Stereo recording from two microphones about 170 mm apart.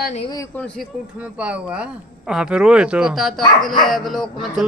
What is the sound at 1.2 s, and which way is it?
Speech, 5° right (ahead or behind).